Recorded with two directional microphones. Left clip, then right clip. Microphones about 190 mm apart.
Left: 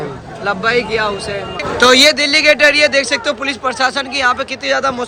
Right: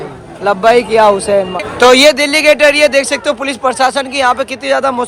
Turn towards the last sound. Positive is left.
turn(degrees=0)  # may be behind; listen again after turning